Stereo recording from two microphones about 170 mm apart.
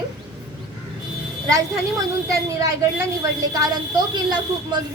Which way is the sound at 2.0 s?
20° right (ahead or behind).